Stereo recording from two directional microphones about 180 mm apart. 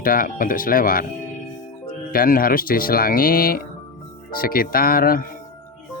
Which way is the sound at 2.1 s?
50° left (ahead or behind).